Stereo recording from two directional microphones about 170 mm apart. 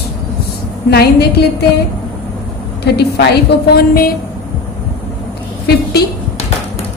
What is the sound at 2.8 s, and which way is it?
Speech, 75° left (ahead or behind).